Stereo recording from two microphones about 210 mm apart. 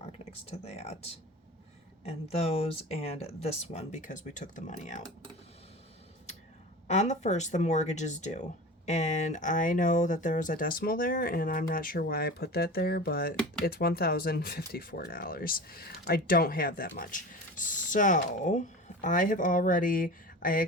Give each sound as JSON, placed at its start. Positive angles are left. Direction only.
{"t": 0.0, "sound": "speech", "side_deg": 30}
{"t": 2.0, "sound": "speech", "side_deg": 30}
{"t": 6.8, "sound": "speech", "side_deg": 35}